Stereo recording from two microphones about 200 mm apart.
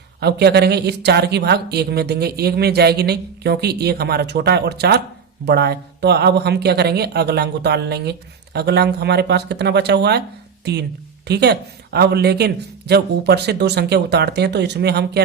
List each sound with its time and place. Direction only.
0.2 s speech: 55° right (ahead or behind)
11.3 s speech: 55° right (ahead or behind)